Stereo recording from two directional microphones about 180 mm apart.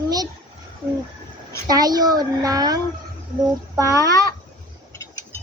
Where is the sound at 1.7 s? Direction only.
20° right (ahead or behind).